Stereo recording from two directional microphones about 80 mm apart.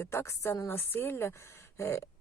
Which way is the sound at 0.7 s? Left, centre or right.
Left.